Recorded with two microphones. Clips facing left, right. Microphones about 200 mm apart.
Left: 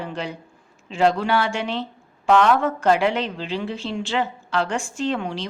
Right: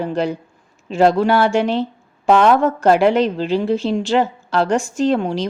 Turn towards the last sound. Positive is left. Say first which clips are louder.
# right 8 dB
turn(degrees=-40)  # may be behind; listen again after turning